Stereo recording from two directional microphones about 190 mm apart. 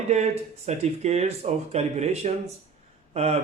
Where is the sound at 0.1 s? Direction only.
35° right (ahead or behind).